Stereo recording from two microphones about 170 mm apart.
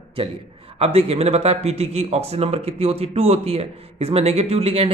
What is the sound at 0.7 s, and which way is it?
A man's voice, 35° right (ahead or behind).